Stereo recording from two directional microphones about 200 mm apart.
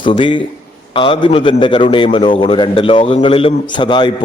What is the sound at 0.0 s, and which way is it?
A man's voice, 25° left (ahead or behind).